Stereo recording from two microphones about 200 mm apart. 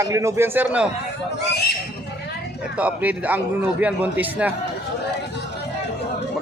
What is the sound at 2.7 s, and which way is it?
Speech, 5° right (ahead or behind).